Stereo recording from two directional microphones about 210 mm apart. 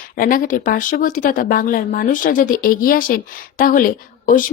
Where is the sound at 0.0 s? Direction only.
40° left (ahead or behind).